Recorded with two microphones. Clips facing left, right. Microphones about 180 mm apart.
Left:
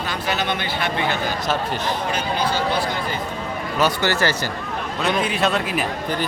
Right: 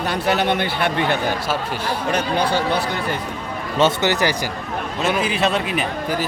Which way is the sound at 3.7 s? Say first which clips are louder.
Right 3 dB; 20° right (ahead or behind).